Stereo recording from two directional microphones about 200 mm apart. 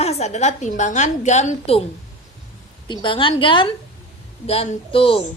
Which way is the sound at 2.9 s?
25° left (ahead or behind).